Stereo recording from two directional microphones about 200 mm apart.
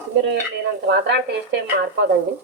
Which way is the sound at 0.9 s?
60° right (ahead or behind).